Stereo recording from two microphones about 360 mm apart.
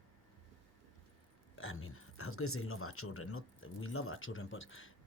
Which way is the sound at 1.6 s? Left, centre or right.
Left.